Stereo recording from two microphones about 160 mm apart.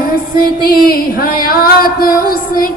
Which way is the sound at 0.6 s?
65° left (ahead or behind).